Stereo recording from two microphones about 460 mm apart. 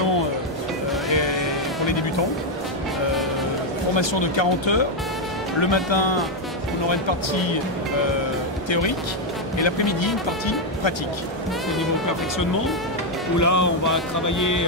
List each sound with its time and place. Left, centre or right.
1.1 s vehicle: left
3.9 s speech: left
8.6 s speech: left
13.4 s music: left